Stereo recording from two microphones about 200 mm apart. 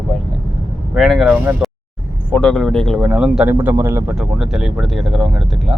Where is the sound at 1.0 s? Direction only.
Centre (ahead or behind).